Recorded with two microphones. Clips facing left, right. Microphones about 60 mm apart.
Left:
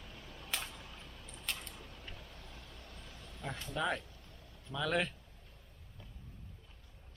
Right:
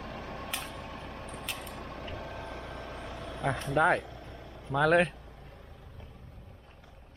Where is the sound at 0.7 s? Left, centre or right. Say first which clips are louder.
Right 11 dB; right.